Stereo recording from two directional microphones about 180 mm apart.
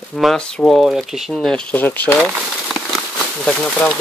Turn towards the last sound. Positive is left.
turn(degrees=5)  # may be behind; listen again after turning